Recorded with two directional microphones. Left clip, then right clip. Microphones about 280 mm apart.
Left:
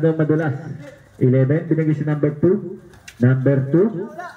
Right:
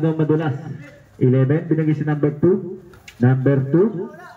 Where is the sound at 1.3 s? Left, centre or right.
Left.